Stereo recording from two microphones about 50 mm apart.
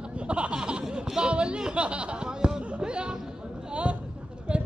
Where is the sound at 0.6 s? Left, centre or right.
Centre.